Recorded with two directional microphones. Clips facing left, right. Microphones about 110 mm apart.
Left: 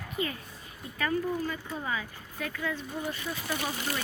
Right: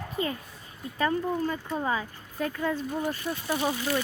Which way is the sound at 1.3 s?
45° right (ahead or behind).